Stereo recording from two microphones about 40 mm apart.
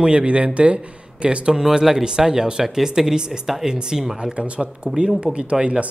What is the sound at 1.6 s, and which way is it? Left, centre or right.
Speech, centre.